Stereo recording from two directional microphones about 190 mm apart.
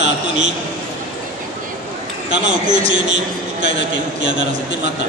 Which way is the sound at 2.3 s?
40° right (ahead or behind).